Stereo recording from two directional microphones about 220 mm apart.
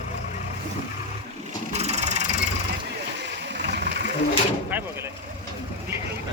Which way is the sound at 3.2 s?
50° right (ahead or behind).